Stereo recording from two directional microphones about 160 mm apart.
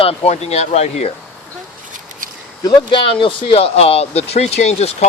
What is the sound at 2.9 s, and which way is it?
Speech, 30° left (ahead or behind).